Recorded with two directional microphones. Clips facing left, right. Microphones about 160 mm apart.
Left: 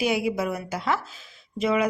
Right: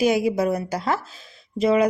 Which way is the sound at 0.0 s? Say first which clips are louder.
Right 5 dB; 40° right (ahead or behind).